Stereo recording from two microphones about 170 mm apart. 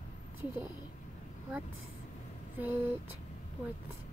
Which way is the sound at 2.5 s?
10° right (ahead or behind).